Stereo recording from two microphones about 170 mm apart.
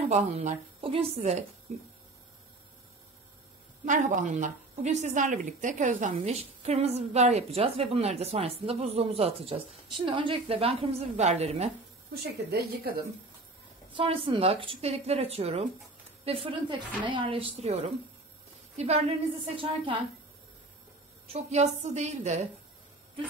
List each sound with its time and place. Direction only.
0.1 s a woman's voice: 45° right (ahead or behind)
3.8 s a woman's voice: 50° right (ahead or behind)
12.1 s a woman's voice: 65° right (ahead or behind)
13.9 s a woman's voice: 30° right (ahead or behind)
21.3 s a woman's voice: 40° right (ahead or behind)